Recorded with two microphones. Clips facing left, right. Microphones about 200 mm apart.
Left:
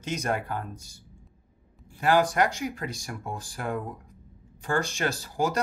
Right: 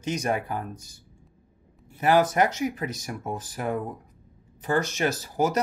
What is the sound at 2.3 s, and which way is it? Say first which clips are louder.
Speech: right 2 dB; 20° right (ahead or behind).